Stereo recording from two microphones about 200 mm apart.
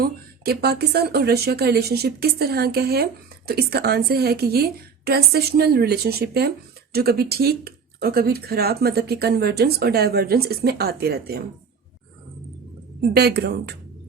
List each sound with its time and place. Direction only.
0.0 s speech: 50° right (ahead or behind)
13.0 s speech: 55° right (ahead or behind)